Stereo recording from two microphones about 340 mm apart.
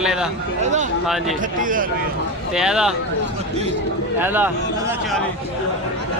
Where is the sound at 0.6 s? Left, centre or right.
Right.